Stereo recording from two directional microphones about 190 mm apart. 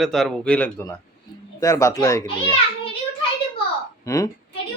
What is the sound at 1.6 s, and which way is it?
Speech, 20° left (ahead or behind).